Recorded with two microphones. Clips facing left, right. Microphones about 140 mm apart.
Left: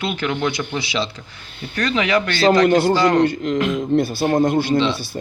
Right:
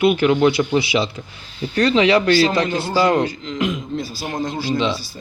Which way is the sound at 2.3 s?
60° left (ahead or behind).